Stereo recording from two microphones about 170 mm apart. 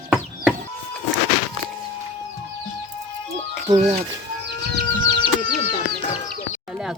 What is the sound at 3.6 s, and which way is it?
Speech, 35° right (ahead or behind).